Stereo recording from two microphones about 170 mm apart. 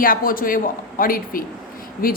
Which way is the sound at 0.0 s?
55° left (ahead or behind).